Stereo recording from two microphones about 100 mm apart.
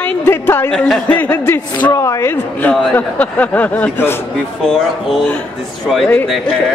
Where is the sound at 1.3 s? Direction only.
25° left (ahead or behind).